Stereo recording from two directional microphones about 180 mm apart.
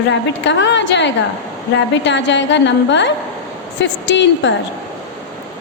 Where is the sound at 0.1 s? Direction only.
85° left.